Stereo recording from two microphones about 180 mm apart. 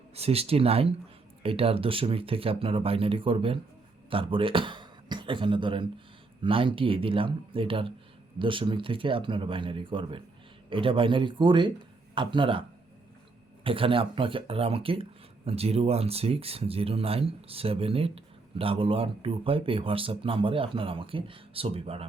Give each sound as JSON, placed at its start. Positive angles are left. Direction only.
{"t": 0.2, "sound": "speech", "side_deg": -35}
{"t": 13.7, "sound": "speech", "side_deg": -30}